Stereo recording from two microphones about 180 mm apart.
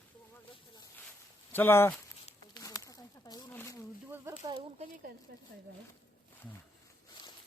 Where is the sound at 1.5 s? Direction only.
15° left (ahead or behind).